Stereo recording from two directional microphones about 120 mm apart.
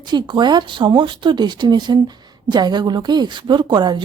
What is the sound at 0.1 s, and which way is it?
A woman's voice, 40° right (ahead or behind).